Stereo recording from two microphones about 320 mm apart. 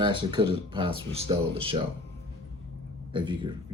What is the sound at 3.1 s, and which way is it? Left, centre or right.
Speech, centre.